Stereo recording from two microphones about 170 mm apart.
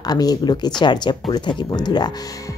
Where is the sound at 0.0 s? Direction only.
25° left (ahead or behind).